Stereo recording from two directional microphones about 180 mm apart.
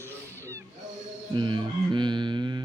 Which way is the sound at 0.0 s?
15° right (ahead or behind).